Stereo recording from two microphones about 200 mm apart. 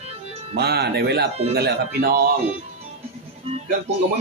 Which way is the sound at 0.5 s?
55° right (ahead or behind).